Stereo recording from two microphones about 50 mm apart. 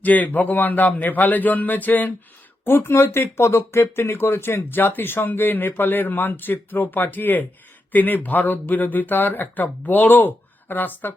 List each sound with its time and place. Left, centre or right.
0.0 s speech: left
2.6 s speech: left